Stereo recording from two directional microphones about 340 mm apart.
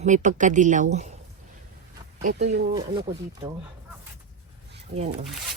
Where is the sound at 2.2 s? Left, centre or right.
Right.